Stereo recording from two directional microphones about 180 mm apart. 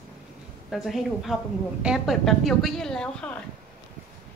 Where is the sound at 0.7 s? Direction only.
Centre (ahead or behind).